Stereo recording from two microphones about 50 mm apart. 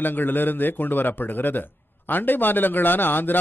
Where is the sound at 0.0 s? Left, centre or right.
Left.